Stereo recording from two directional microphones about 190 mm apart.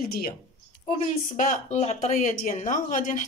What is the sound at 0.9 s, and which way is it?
Speech, 40° left (ahead or behind).